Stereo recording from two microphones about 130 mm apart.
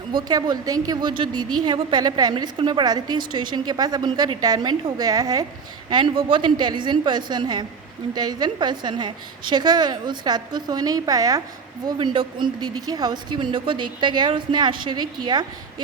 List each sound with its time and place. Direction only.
0.1 s a woman's voice: 35° right (ahead or behind)